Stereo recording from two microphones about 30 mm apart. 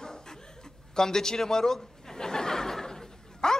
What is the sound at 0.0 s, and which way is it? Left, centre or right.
Laughter, centre.